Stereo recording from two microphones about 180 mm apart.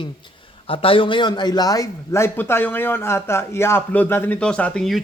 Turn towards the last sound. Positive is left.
turn(degrees=0)  # may be behind; listen again after turning